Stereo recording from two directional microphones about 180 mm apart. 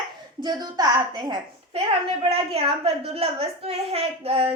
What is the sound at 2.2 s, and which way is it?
A woman's voice, 35° right (ahead or behind).